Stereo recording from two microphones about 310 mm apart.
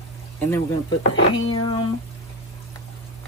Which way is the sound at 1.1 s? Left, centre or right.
Left.